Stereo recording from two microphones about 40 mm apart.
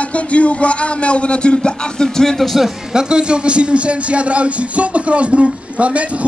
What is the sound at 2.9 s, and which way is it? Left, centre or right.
A man's voice, right.